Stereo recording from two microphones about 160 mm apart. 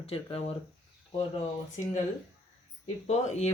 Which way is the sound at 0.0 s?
40° left (ahead or behind).